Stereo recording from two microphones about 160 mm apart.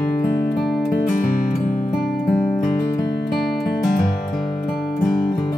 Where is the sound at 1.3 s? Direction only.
60° left (ahead or behind).